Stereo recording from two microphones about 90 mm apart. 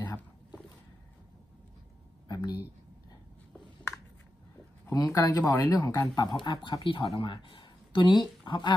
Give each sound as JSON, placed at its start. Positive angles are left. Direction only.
{"t": 0.0, "sound": "boat", "side_deg": 50}
{"t": 2.2, "sound": "a sound", "side_deg": 50}
{"t": 4.9, "sound": "speech", "side_deg": 40}